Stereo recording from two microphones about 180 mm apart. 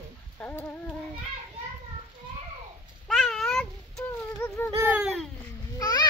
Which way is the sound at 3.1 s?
Centre (ahead or behind).